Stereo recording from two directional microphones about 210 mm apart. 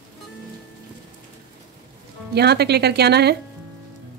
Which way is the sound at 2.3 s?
50° right (ahead or behind).